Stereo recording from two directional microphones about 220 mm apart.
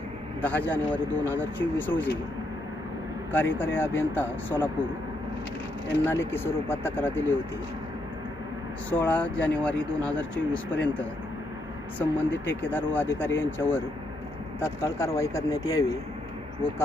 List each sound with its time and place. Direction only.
0.4 s speech: 5° left (ahead or behind)
3.3 s speech: 10° left (ahead or behind)
6.1 s speech: 10° left (ahead or behind)
8.9 s speech: 5° left (ahead or behind)
11.9 s speech: 10° left (ahead or behind)